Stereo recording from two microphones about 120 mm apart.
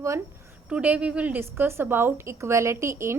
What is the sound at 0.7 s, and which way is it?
A woman's voice, 10° right (ahead or behind).